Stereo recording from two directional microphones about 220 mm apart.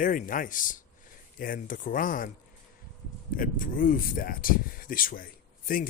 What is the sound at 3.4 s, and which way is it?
Speech, 40° left (ahead or behind).